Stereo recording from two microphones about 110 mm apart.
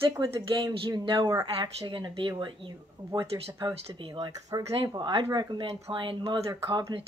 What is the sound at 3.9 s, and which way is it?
Speech, 45° right (ahead or behind).